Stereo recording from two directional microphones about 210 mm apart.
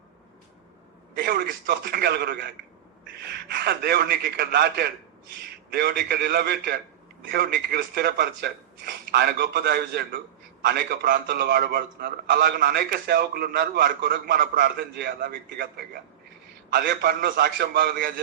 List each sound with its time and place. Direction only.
1.2 s a man's voice: 45° right (ahead or behind)
3.5 s a man's voice: 50° right (ahead or behind)